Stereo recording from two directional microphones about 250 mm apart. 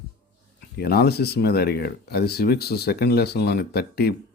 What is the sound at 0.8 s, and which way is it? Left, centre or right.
Speech, left.